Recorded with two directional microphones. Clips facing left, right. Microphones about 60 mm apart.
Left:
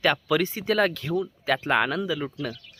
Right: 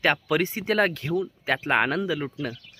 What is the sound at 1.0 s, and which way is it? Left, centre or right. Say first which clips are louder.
Speech: even; centre.